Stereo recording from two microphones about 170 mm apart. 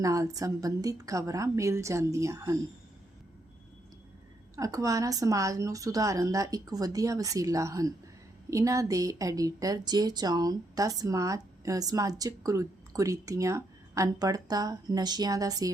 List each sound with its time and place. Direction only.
0.0 s a woman's voice: 20° right (ahead or behind)
4.5 s a woman's voice: 20° right (ahead or behind)